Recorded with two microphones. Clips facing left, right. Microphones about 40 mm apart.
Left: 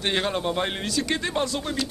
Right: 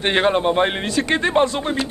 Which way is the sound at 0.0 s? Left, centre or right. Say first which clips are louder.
Right 8 dB; right.